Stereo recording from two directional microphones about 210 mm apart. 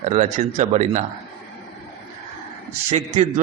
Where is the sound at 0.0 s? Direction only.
35° right (ahead or behind).